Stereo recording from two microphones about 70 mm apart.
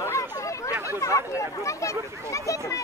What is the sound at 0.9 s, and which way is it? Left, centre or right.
Speech, left.